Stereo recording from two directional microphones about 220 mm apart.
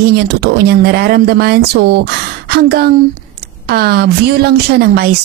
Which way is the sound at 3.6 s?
45° right (ahead or behind).